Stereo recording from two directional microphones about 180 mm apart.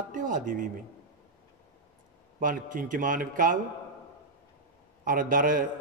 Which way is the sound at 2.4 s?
50° right (ahead or behind).